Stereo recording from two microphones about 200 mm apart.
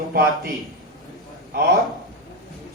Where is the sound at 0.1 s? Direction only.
50° right (ahead or behind).